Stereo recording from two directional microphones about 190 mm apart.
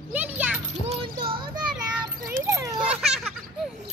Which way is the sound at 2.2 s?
15° right (ahead or behind).